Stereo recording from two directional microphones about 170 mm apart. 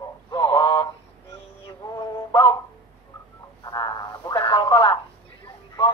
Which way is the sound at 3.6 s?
20° left (ahead or behind).